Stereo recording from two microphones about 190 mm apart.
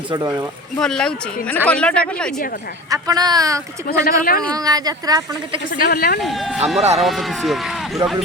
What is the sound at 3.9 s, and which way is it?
Speech, 50° left (ahead or behind).